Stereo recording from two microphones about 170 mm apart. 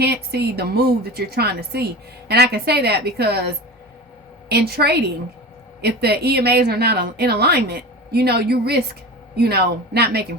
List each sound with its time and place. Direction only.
0.0 s a woman's voice: 75° right (ahead or behind)